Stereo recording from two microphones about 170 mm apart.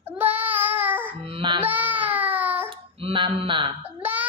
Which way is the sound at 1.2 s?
30° right (ahead or behind).